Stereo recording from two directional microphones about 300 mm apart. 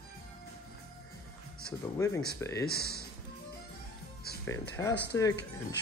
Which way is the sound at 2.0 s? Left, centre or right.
Centre.